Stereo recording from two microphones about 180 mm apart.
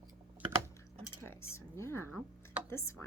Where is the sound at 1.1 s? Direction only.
15° left (ahead or behind).